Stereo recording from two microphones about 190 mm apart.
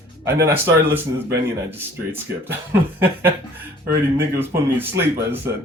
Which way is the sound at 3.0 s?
10° right (ahead or behind).